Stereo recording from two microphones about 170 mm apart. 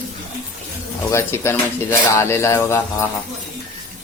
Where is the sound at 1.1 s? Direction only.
15° left (ahead or behind).